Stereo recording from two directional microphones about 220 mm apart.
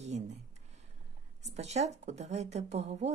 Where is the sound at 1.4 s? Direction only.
30° right (ahead or behind).